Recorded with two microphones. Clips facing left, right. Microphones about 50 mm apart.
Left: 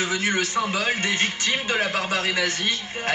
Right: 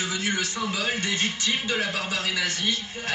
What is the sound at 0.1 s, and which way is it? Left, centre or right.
Speech, left.